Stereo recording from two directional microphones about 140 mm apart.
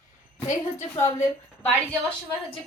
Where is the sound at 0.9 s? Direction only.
20° left (ahead or behind).